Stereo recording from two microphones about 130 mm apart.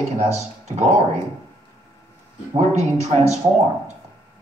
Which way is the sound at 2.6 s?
65° right (ahead or behind).